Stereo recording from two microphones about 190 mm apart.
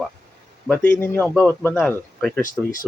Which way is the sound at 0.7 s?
10° left (ahead or behind).